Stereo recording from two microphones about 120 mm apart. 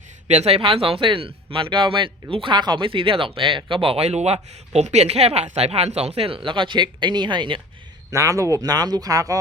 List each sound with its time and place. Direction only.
0.3 s speech: 60° right (ahead or behind); by 7.6 s 40° right (ahead or behind)
8.1 s speech: 25° right (ahead or behind)